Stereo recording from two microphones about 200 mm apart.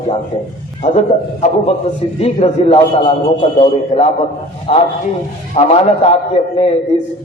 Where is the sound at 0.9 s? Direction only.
35° left (ahead or behind).